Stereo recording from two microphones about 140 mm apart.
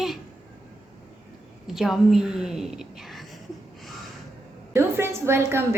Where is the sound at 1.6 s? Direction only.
Centre (ahead or behind).